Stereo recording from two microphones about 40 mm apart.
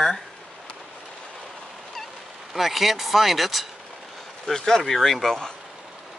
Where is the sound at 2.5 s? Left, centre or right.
Centre.